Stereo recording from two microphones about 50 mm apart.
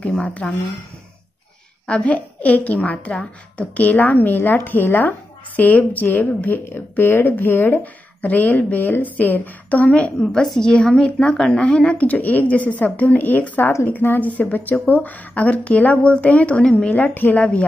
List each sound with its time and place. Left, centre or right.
1.9 s a woman's voice: left
6.7 s speech: left
10.2 s a woman's voice: centre
12.1 s a woman's voice: left